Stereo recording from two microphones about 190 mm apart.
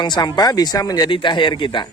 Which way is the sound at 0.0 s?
25° left (ahead or behind).